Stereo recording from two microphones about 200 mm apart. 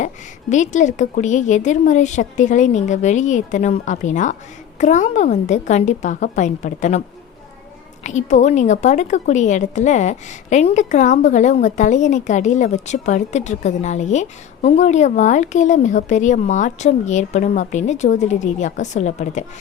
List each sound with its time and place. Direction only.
0.5 s a woman's voice: 40° left (ahead or behind)
8.0 s a woman's voice: 35° left (ahead or behind)